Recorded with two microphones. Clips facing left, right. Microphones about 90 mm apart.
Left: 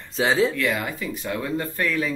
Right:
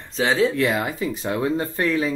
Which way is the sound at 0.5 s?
30° right (ahead or behind).